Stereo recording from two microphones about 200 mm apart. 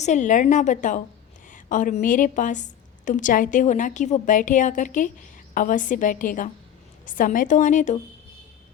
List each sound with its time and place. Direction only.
0.0 s a woman's voice: 35° left (ahead or behind)